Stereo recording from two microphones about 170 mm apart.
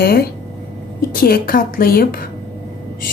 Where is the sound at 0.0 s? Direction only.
60° left (ahead or behind).